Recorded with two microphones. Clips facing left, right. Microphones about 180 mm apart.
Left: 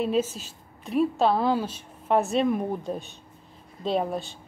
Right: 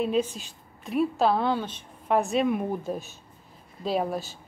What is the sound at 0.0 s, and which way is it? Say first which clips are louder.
A woman's voice: left 1 dB; centre (ahead or behind).